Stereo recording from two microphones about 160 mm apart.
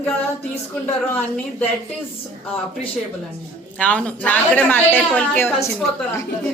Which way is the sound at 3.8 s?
10° left (ahead or behind).